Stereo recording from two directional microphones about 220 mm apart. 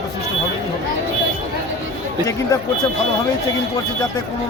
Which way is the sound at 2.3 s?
15° left (ahead or behind).